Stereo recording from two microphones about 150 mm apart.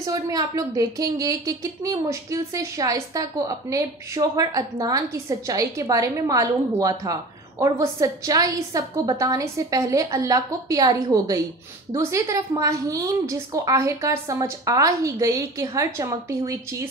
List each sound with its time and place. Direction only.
0.0 s a woman's voice: 25° right (ahead or behind)